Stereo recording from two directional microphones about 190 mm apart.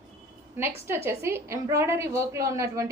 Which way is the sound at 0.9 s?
15° right (ahead or behind).